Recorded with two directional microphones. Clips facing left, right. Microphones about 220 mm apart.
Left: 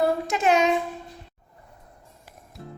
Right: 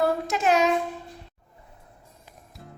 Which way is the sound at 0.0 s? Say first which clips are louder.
Left 1 dB; centre (ahead or behind).